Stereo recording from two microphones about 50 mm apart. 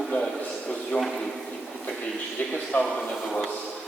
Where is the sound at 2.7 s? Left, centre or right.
Left.